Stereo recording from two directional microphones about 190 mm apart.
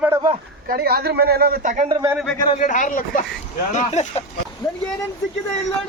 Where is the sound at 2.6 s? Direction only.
45° left (ahead or behind).